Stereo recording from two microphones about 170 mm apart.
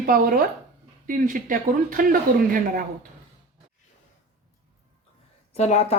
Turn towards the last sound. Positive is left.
turn(degrees=40)  # may be behind; listen again after turning